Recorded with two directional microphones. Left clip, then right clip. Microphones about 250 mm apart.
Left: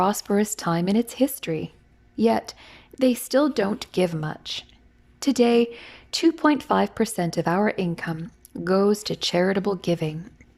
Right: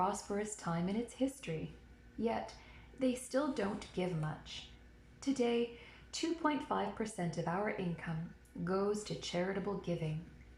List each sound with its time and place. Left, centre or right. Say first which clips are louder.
0.0 s speech: left 14 dB; left
3.0 s speech: left 15 dB; left